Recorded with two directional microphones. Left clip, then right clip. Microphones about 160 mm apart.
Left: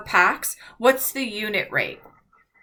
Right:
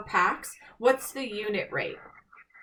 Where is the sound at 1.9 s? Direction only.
35° right (ahead or behind).